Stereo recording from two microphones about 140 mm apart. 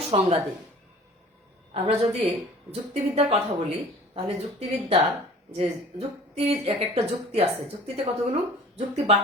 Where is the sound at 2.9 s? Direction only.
45° right (ahead or behind).